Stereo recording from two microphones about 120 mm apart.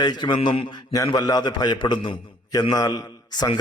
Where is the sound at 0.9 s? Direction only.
30° left (ahead or behind).